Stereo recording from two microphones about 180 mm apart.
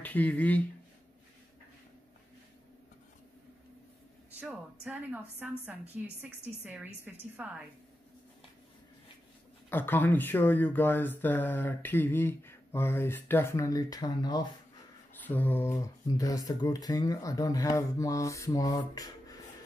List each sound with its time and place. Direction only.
0.0 s speech: 10° left (ahead or behind)
4.4 s a woman's voice: 5° right (ahead or behind)
9.7 s speech: 10° left (ahead or behind)
15.2 s speech: 10° left (ahead or behind)